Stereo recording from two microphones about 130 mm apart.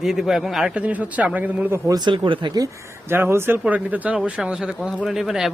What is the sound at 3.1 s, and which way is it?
Speech, 20° right (ahead or behind).